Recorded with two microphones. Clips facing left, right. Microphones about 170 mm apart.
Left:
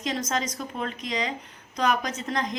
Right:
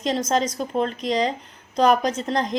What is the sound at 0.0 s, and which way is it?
A woman's voice, 30° right (ahead or behind).